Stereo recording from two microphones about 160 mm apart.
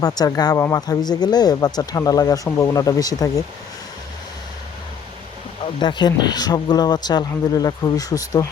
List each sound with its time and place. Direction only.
0.0 s speech: 25° left (ahead or behind)
5.8 s speech: 30° left (ahead or behind)